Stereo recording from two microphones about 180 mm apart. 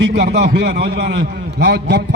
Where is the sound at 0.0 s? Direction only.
70° right (ahead or behind).